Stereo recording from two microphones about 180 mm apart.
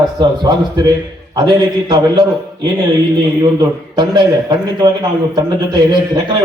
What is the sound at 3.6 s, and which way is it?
Speech, 25° right (ahead or behind).